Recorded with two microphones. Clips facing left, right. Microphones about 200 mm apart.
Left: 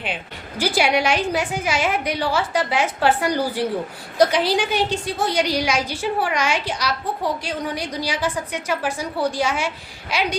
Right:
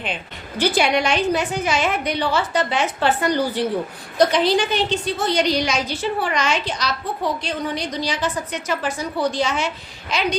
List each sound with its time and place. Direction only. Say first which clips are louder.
0.6 s a woman's voice: right 1 dB; 10° left (ahead or behind)